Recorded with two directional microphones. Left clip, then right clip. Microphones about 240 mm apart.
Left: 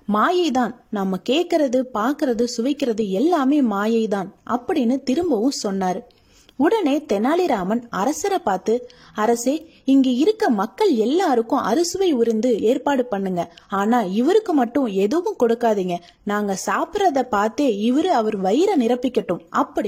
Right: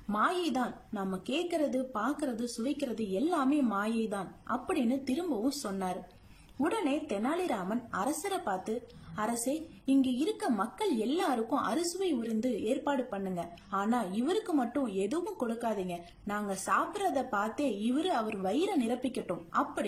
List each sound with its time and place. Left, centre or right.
0.1 s a woman's voice: left